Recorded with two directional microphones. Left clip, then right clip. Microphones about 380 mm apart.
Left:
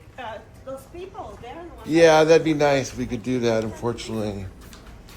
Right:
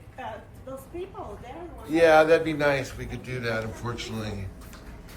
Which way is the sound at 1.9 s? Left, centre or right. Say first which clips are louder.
Left 3 dB; centre.